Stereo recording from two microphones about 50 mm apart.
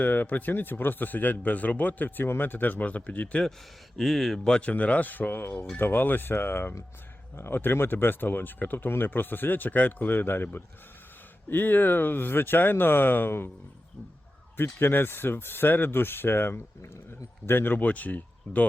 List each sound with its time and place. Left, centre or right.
0.0 s speech: left
3.9 s speech: centre
4.4 s speech: centre
4.7 s speech: left
14.5 s speech: left